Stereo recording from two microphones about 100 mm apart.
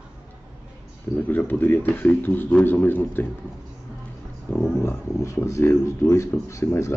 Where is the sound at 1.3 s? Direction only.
20° left (ahead or behind).